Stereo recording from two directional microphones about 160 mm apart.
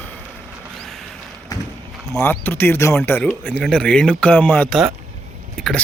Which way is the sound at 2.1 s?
15° left (ahead or behind).